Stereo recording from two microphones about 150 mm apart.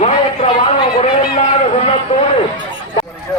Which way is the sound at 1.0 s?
45° left (ahead or behind).